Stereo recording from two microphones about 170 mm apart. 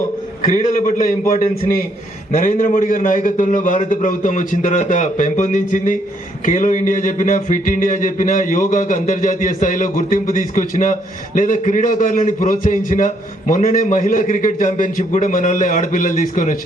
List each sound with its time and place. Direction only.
0.5 s speech: 45° left (ahead or behind)
2.3 s speech: 50° left (ahead or behind)